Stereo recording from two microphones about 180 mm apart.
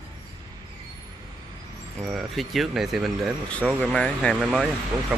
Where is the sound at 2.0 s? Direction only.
5° right (ahead or behind).